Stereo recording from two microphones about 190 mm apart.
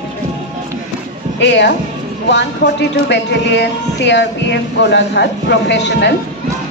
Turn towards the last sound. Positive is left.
turn(degrees=65)  # may be behind; listen again after turning